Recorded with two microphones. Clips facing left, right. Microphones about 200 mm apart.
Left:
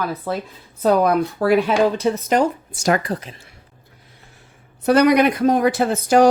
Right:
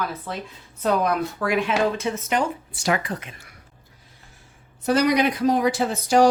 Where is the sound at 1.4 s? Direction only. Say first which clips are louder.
Left 6 dB; 35° left (ahead or behind).